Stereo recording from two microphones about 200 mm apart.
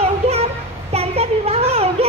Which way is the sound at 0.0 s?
30° right (ahead or behind).